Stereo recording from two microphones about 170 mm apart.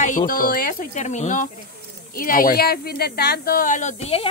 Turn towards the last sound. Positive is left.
turn(degrees=40)  # may be behind; listen again after turning